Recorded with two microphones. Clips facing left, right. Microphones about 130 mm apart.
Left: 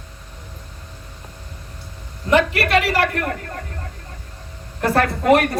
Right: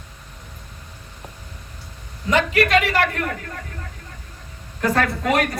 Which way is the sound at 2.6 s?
40° left (ahead or behind).